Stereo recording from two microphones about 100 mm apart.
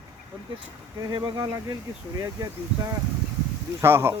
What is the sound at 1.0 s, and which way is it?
Speech, 55° right (ahead or behind).